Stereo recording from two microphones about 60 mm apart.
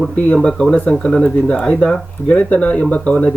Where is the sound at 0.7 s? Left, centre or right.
Centre.